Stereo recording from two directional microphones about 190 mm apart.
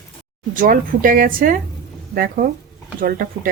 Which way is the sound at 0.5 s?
45° right (ahead or behind).